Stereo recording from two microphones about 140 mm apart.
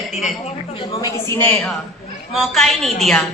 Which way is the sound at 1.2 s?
20° left (ahead or behind).